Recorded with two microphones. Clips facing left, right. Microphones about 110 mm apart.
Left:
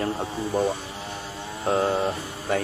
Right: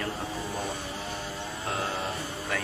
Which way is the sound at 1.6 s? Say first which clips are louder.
Left 10 dB; 35° left (ahead or behind).